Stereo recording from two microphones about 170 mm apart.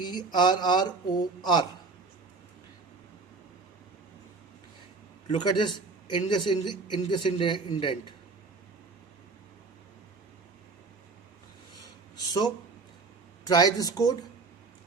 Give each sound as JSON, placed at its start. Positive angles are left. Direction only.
{"t": 0.0, "sound": "a man's voice", "side_deg": 25}
{"t": 5.3, "sound": "a man's voice", "side_deg": 25}
{"t": 12.1, "sound": "speech", "side_deg": 25}
{"t": 13.5, "sound": "a man's voice", "side_deg": 25}